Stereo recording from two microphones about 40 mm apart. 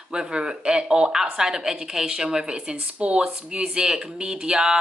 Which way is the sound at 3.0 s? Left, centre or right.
Right.